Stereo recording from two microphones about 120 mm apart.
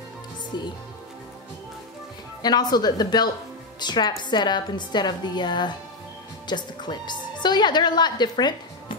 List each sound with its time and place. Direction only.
2.4 s a woman's voice: 35° left (ahead or behind)